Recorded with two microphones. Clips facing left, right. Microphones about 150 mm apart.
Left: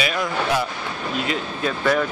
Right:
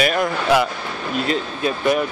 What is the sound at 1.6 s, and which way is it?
Speech, 20° right (ahead or behind).